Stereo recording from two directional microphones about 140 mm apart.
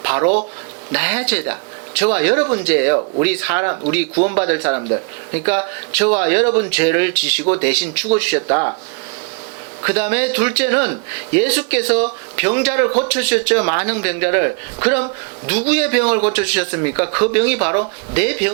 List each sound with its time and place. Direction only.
0.0 s a sound: 15° right (ahead or behind)
0.9 s speech: 10° right (ahead or behind)
8.4 s speech: 25° right (ahead or behind)
9.8 s speech: 10° right (ahead or behind)